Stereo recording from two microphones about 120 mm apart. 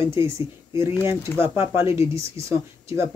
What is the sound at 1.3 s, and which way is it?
Speech, 15° left (ahead or behind).